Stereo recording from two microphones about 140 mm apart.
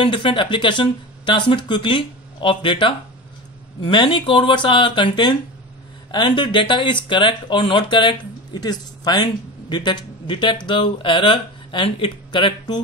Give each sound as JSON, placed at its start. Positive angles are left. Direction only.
{"t": 0.0, "sound": "speech", "side_deg": 35}